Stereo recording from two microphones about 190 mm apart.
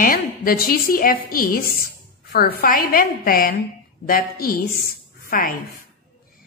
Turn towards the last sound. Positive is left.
turn(degrees=50)  # may be behind; listen again after turning